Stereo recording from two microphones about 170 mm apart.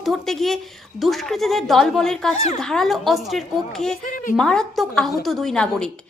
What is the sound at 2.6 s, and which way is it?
Speech, 5° left (ahead or behind).